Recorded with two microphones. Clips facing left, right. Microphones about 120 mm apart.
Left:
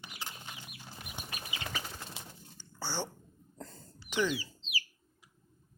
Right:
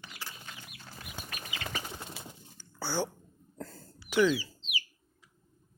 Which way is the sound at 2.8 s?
10° right (ahead or behind).